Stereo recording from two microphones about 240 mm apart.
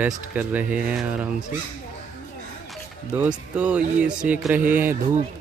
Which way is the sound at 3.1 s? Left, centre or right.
Centre.